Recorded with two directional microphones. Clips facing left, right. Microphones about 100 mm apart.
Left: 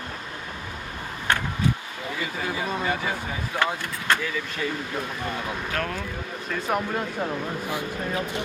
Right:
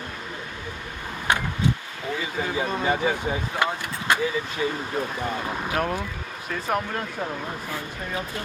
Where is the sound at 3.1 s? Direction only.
15° right (ahead or behind).